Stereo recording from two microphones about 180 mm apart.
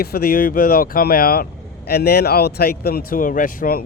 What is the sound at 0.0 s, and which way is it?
A man's voice, 60° left (ahead or behind).